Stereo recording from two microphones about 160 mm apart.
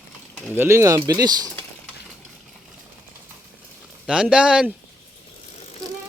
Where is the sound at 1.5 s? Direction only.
10° left (ahead or behind).